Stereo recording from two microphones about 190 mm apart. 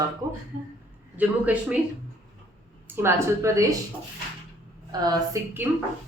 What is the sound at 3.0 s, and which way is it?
Speech, 15° right (ahead or behind).